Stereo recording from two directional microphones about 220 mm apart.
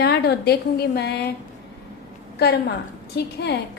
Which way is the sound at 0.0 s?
50° left (ahead or behind).